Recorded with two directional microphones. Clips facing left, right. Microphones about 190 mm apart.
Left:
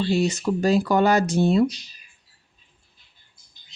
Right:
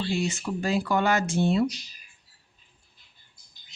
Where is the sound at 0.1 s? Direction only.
40° left (ahead or behind).